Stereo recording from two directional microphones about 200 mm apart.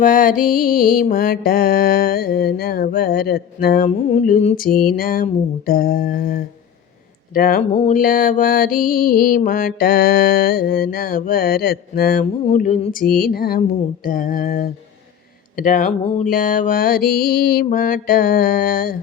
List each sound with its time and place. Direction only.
0.0 s mantra: 40° left (ahead or behind)
3.8 s mantra: 35° left (ahead or behind)
12.2 s mantra: 40° left (ahead or behind)